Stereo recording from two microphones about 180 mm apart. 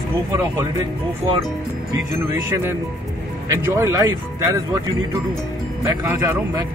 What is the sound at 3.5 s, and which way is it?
Speech, 15° right (ahead or behind).